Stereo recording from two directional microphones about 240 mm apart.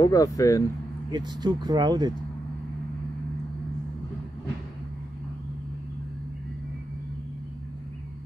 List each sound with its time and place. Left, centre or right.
0.0 s speech: centre
1.1 s speech: centre